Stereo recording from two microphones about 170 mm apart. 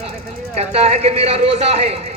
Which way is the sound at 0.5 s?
40° right (ahead or behind).